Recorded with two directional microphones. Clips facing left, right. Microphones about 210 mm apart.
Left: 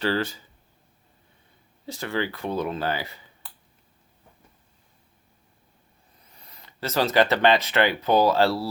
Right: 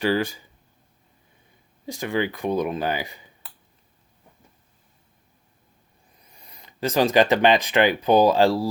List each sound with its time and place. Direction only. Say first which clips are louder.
0.0 s speech: right 3 dB; 10° right (ahead or behind)
1.9 s speech: right 3 dB; 15° right (ahead or behind)
6.3 s speech: right 1 dB; 15° right (ahead or behind)